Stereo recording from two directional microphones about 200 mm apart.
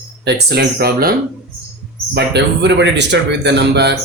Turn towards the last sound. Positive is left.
turn(degrees=-55)  # may be behind; listen again after turning